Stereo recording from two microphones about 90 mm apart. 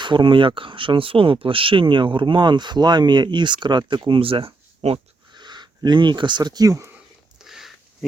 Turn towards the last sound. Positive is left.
turn(degrees=-5)  # may be behind; listen again after turning